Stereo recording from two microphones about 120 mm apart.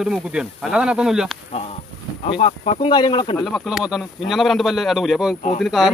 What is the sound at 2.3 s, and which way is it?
Speech, 60° left (ahead or behind).